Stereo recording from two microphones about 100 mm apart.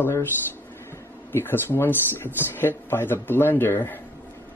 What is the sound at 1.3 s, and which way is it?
Speech, 20° left (ahead or behind).